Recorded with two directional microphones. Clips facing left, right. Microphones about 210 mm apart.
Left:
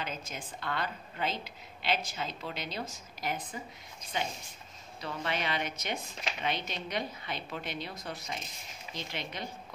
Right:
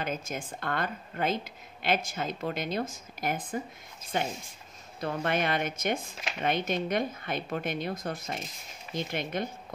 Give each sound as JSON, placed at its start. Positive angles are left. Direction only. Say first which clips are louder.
{"t": 0.0, "sound": "a woman's voice", "louder": "right 6 dB", "side_deg": -50}